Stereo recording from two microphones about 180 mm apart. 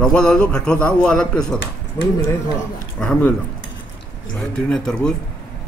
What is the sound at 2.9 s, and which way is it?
Speech, 5° left (ahead or behind).